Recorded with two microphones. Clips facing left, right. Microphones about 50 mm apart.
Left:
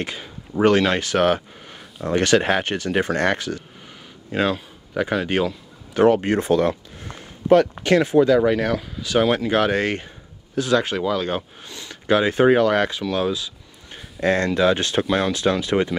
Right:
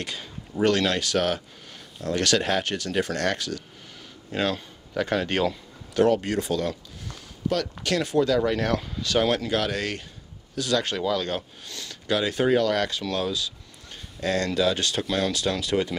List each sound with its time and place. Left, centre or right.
0.0 s speech: left
5.9 s speech: left
9.5 s speech: left